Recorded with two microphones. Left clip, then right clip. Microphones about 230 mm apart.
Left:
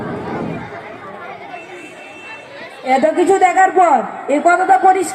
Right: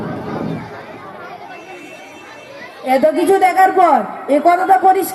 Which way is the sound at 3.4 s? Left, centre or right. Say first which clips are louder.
Right 1 dB; right.